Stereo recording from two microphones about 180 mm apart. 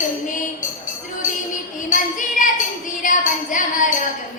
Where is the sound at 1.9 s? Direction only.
45° left (ahead or behind).